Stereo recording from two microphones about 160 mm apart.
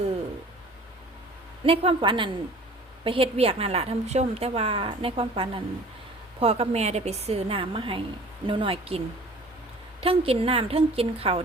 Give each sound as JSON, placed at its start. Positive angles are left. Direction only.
{"t": 1.6, "sound": "a woman's voice", "side_deg": -35}
{"t": 10.0, "sound": "a woman's voice", "side_deg": -35}